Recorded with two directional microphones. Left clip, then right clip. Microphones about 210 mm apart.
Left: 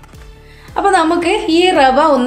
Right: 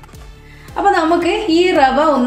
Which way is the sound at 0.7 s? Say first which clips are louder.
Left 1 dB; 45° left (ahead or behind).